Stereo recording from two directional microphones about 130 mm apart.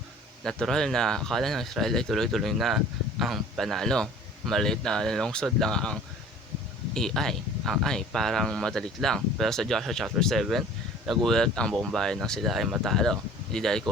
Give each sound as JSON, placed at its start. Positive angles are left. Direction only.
{"t": 0.4, "sound": "speech", "side_deg": 5}